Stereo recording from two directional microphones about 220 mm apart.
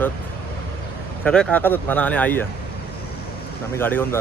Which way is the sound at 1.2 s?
5° left (ahead or behind).